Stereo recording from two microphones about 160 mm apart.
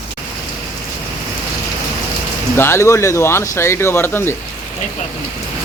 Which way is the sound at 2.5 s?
15° left (ahead or behind).